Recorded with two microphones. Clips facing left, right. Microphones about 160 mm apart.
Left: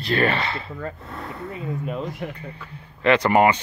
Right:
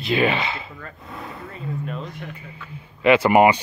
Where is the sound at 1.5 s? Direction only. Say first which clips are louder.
Left 2 dB; 10° left (ahead or behind).